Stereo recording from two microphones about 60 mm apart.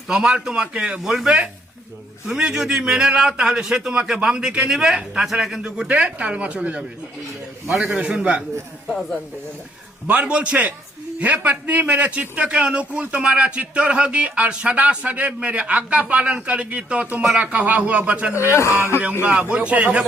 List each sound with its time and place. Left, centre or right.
0.1 s a man's voice: centre
5.9 s a man's voice: right
8.9 s speech: centre
10.1 s a man's voice: right